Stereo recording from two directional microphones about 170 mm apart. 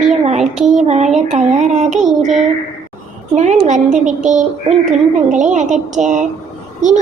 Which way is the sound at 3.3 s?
45° right (ahead or behind).